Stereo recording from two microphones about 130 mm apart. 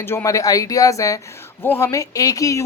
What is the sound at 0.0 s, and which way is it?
Speech, 20° left (ahead or behind).